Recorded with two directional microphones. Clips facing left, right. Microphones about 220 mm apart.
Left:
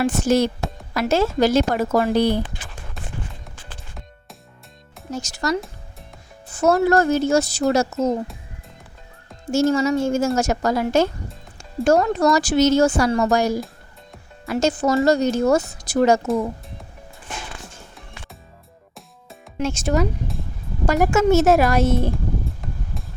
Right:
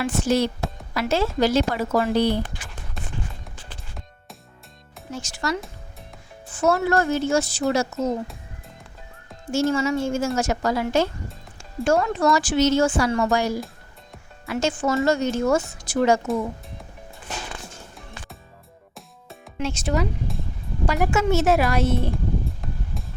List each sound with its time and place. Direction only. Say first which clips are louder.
0.0 s speech: left 3 dB; 45° left (ahead or behind)
5.1 s speech: left 4 dB; 40° left (ahead or behind)
5.5 s music: left 5 dB; centre (ahead or behind)
6.5 s speech: left 4 dB; 40° left (ahead or behind)
9.5 s speech: left 3 dB; 40° left (ahead or behind)
19.5 s speech: left 4 dB; 45° left (ahead or behind)
22.6 s a sound: left 1 dB; centre (ahead or behind)